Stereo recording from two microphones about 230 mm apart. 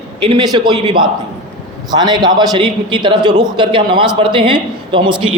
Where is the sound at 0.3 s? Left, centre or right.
Centre.